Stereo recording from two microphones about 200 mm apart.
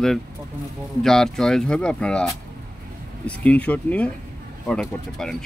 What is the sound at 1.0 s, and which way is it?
Speech, centre (ahead or behind).